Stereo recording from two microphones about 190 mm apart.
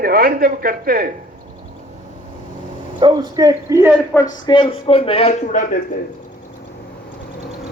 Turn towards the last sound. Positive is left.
turn(degrees=40)  # may be behind; listen again after turning